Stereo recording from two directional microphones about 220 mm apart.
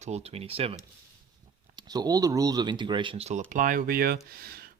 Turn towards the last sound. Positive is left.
turn(degrees=-45)  # may be behind; listen again after turning